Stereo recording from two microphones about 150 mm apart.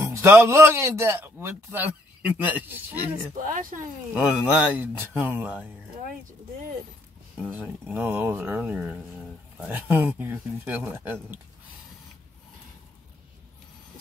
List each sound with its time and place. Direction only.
0.0 s a man's voice: 20° right (ahead or behind)
3.3 s speech: 60° right (ahead or behind)
4.1 s a man's voice: 5° right (ahead or behind)
7.5 s a man's voice: 10° right (ahead or behind)
8.9 s a sound: 5° left (ahead or behind)
9.7 s a man's voice: 15° right (ahead or behind)